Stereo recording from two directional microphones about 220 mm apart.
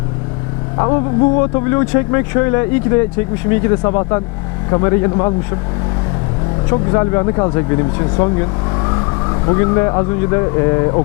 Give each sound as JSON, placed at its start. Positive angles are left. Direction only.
{"t": 0.8, "sound": "speech", "side_deg": 20}
{"t": 6.7, "sound": "speech", "side_deg": 15}